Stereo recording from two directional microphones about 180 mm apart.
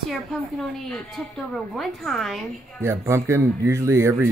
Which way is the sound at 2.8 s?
15° right (ahead or behind).